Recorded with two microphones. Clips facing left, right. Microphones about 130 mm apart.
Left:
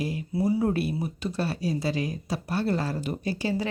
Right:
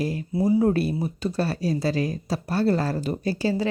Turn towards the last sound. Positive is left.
turn(degrees=-35)  # may be behind; listen again after turning